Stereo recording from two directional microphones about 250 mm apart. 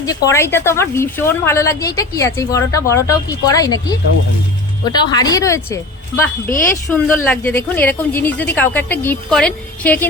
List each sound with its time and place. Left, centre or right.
0.0 s a woman's voice: centre